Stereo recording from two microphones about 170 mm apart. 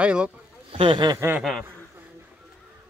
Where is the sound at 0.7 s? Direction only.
30° right (ahead or behind).